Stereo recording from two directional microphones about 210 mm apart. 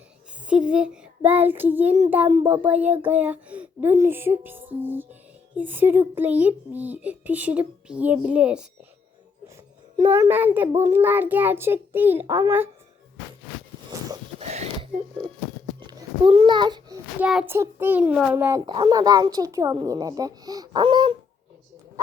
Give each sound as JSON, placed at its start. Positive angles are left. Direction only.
{"t": 0.4, "sound": "child singing", "side_deg": -5}
{"t": 2.5, "sound": "a child's voice", "side_deg": -10}
{"t": 10.0, "sound": "a child's voice", "side_deg": -10}
{"t": 14.3, "sound": "a sound", "side_deg": -30}
{"t": 15.9, "sound": "babbling", "side_deg": -20}
{"t": 17.2, "sound": "a child's voice", "side_deg": -5}